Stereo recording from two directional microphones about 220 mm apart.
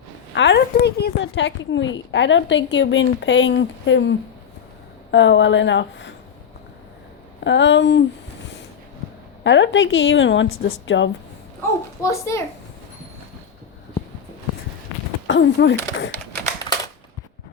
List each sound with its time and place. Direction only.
0.3 s speech: 55° left (ahead or behind)
5.1 s speech: 55° left (ahead or behind)
7.4 s speech: 55° left (ahead or behind)
9.4 s speech: 55° left (ahead or behind)
12.0 s a child's voice: 15° left (ahead or behind)
15.3 s speech: 55° left (ahead or behind)
16.1 s typewriter: 10° left (ahead or behind)